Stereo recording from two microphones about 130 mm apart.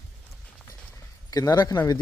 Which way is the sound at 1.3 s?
30° left (ahead or behind).